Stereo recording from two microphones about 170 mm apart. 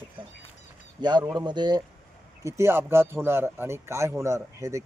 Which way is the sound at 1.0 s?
25° right (ahead or behind).